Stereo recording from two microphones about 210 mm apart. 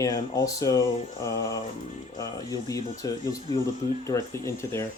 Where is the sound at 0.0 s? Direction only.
15° left (ahead or behind).